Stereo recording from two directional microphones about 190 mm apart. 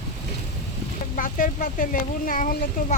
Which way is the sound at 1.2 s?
45° left (ahead or behind).